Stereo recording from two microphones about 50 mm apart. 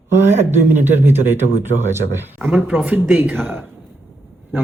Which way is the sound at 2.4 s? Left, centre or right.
Centre.